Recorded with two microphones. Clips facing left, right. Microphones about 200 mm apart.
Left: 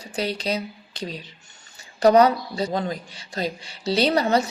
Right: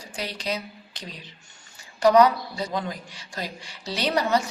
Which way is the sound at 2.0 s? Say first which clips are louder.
Left 2 dB; 30° left (ahead or behind).